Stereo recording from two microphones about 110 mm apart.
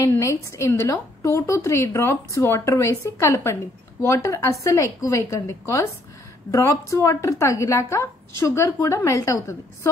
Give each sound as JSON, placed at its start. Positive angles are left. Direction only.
{"t": 0.0, "sound": "a woman's voice", "side_deg": 25}